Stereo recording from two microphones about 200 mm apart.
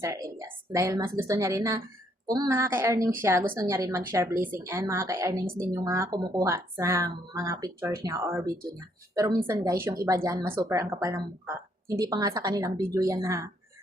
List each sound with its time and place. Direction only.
0.0 s a woman's voice: 15° right (ahead or behind)